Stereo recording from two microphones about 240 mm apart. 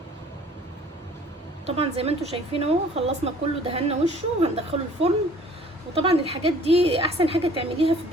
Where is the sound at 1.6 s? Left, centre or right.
Right.